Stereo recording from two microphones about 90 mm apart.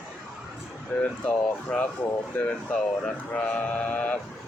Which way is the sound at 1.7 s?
5° left (ahead or behind).